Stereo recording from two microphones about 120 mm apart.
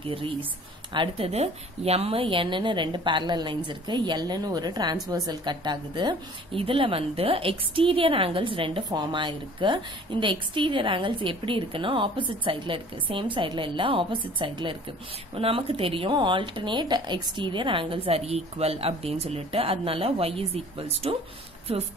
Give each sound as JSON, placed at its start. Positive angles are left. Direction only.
{"t": 0.9, "sound": "a woman's voice", "side_deg": -45}